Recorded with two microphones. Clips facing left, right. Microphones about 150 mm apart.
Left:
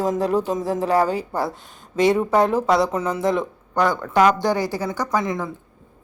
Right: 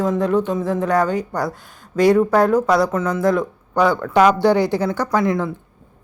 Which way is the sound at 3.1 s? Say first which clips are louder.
Right 3 dB; 25° left (ahead or behind).